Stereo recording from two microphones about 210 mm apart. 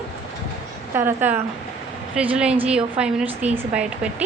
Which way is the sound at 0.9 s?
10° right (ahead or behind).